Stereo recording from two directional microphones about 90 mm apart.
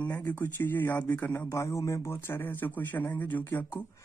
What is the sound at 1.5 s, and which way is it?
Speech, 35° left (ahead or behind).